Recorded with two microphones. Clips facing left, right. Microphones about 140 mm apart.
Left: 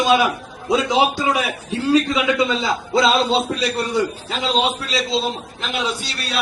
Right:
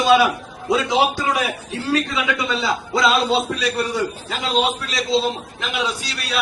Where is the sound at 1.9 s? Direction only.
20° left (ahead or behind).